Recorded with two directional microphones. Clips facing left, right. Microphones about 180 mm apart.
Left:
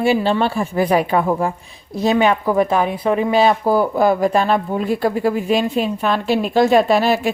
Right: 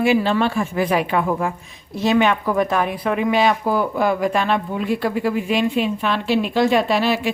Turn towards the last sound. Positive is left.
turn(degrees=45)  # may be behind; listen again after turning